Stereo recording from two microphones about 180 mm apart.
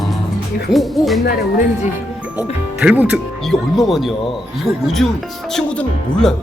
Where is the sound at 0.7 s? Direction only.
Centre (ahead or behind).